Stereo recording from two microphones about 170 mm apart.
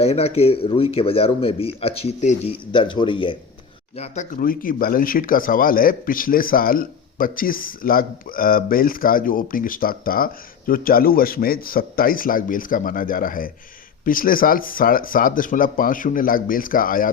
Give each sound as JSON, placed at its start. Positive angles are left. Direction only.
{"t": 0.0, "sound": "speech", "side_deg": 35}
{"t": 3.9, "sound": "speech", "side_deg": 40}